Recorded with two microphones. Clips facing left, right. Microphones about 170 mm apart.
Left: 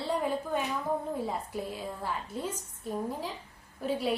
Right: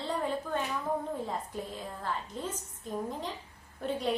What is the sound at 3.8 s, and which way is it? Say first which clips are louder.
Speech: left 1 dB; 5° left (ahead or behind).